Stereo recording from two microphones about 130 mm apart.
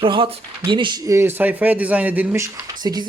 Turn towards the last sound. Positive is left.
turn(degrees=-30)  # may be behind; listen again after turning